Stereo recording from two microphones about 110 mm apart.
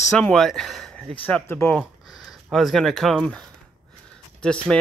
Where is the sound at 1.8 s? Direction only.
Centre (ahead or behind).